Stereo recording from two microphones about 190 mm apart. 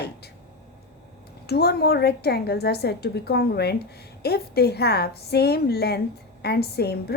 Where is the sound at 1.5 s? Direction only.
55° left (ahead or behind).